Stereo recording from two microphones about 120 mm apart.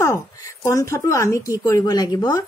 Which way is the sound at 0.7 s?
25° left (ahead or behind).